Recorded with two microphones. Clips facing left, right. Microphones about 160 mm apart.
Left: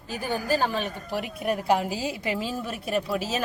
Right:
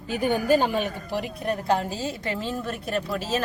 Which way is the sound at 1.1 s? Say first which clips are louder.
Left 1 dB; 5° left (ahead or behind).